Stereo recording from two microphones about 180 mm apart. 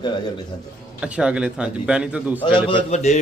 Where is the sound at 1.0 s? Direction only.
5° right (ahead or behind).